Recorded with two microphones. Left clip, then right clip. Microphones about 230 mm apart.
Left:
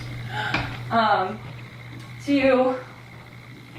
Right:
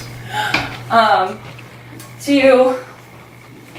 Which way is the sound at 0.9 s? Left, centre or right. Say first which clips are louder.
Right 8 dB; centre.